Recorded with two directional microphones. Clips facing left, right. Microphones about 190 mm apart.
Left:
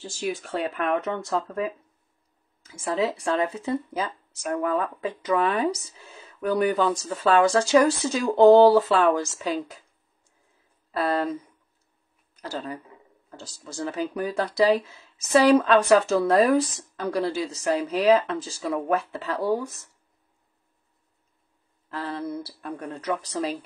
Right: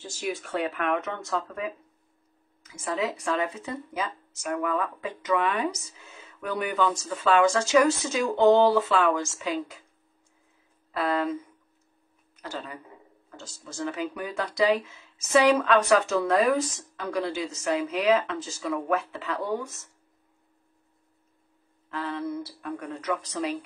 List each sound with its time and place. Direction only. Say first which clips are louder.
0.0 s speech: left 2 dB; 30° left (ahead or behind)
10.9 s speech: left 2 dB; 35° left (ahead or behind)
12.4 s speech: left 4 dB; 35° left (ahead or behind)
21.9 s speech: even; 35° left (ahead or behind)